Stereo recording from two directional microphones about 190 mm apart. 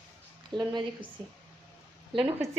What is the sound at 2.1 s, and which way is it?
Speech, 25° right (ahead or behind).